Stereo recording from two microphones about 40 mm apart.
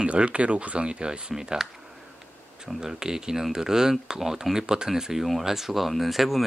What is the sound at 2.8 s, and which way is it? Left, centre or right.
Speech, centre.